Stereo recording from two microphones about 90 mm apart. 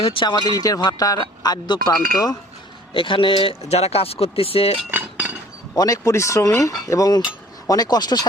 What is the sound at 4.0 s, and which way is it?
Speech, 90° left.